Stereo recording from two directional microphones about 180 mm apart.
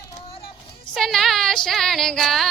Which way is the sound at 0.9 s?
Centre (ahead or behind).